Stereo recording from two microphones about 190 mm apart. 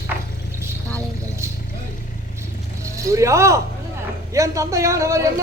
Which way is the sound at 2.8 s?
15° right (ahead or behind).